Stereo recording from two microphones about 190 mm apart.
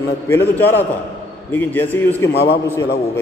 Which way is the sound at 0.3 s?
10° left (ahead or behind).